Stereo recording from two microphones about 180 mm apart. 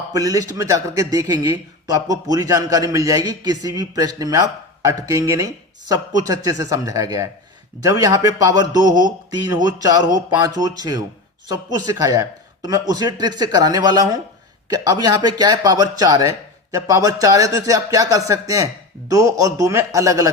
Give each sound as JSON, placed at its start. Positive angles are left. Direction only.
{"t": 0.1, "sound": "a man's voice", "side_deg": -20}